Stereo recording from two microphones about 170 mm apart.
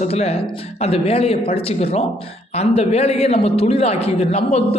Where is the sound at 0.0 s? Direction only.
35° left (ahead or behind).